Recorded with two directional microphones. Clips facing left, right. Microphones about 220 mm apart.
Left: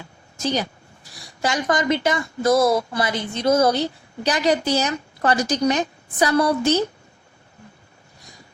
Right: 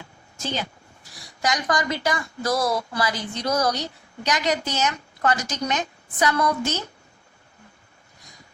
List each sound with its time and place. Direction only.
1.4 s a woman's voice: 25° left (ahead or behind)